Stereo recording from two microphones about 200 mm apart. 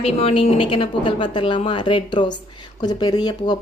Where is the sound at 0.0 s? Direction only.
30° left (ahead or behind).